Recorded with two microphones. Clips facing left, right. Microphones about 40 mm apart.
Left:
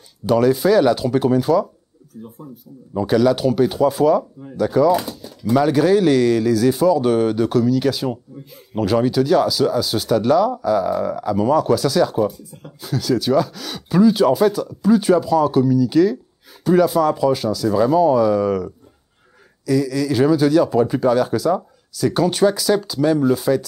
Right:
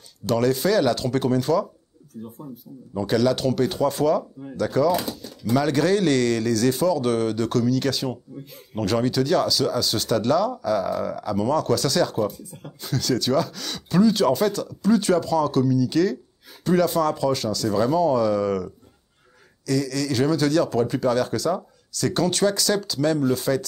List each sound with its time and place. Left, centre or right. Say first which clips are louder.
0.3 s speech: left 6 dB; centre